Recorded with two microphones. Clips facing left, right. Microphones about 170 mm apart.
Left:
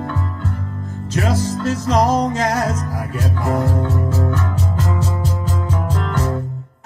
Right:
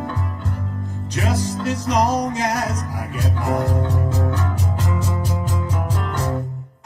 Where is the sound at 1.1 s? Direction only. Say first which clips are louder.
Left 3 dB; 15° right (ahead or behind).